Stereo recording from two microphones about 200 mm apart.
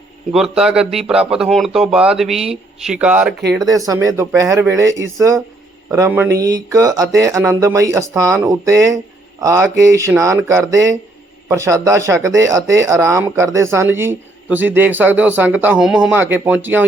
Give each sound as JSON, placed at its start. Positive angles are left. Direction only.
{"t": 0.3, "sound": "speech", "side_deg": -5}
{"t": 3.5, "sound": "speech", "side_deg": -20}